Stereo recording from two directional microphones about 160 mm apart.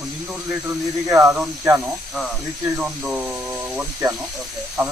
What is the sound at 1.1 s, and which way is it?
Speech, 5° right (ahead or behind).